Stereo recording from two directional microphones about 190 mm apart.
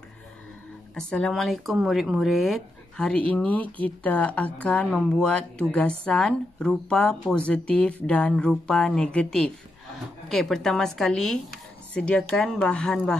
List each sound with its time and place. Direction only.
0.9 s speech: 5° left (ahead or behind)